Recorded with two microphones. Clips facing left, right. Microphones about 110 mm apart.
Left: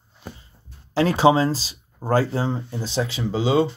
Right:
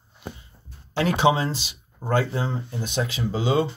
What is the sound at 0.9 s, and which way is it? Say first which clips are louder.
Speech: left 4 dB; 35° left (ahead or behind).